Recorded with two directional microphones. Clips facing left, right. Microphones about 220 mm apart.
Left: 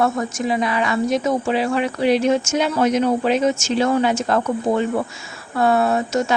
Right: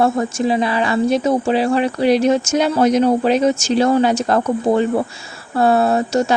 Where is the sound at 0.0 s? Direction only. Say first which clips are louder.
Right 4 dB; 30° right (ahead or behind).